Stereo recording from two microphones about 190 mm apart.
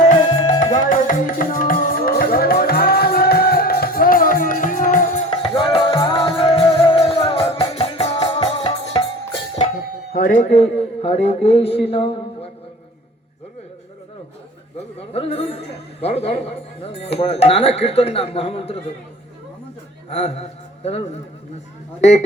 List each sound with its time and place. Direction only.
0.2 s music: 25° left (ahead or behind)
0.6 s music: 40° left (ahead or behind)
5.4 s music: 25° left (ahead or behind)
9.6 s music: 50° left (ahead or behind); by 12.5 s 30° left (ahead or behind)
15.1 s a man's voice: 30° left (ahead or behind)
20.1 s a man's voice: 35° left (ahead or behind)